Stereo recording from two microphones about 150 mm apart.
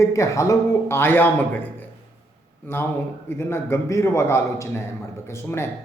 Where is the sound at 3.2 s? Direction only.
15° left (ahead or behind).